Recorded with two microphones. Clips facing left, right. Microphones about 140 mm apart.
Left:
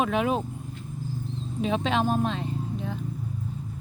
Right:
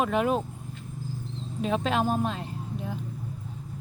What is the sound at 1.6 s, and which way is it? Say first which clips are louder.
Speech: left 1 dB; centre (ahead or behind).